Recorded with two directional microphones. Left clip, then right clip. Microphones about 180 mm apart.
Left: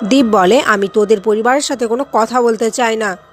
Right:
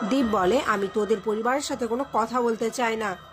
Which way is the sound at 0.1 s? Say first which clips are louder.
Left 13 dB; 45° left (ahead or behind).